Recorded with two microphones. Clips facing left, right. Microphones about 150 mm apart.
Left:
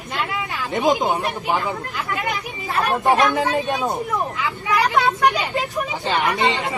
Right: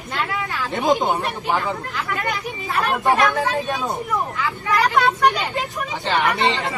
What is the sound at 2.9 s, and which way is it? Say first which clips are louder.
Speech: left 1 dB; 20° left (ahead or behind).